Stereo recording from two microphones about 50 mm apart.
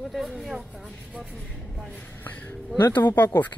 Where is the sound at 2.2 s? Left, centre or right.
Left.